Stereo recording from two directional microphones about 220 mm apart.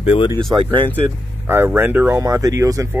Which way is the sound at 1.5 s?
10° right (ahead or behind).